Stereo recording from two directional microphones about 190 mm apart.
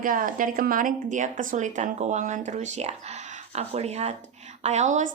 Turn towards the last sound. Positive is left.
turn(degrees=-40)  # may be behind; listen again after turning